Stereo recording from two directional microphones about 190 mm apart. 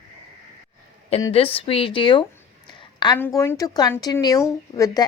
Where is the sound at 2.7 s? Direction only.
25° left (ahead or behind).